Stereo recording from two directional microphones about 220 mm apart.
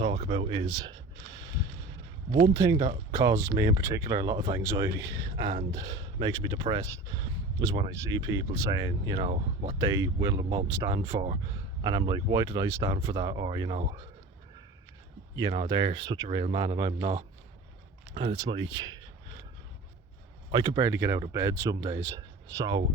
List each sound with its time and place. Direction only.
0.0 s speech: 25° right (ahead or behind)
0.7 s a sound: 20° right (ahead or behind)
2.5 s speech: 15° right (ahead or behind)
15.4 s speech: 20° right (ahead or behind)
20.5 s speech: 20° right (ahead or behind)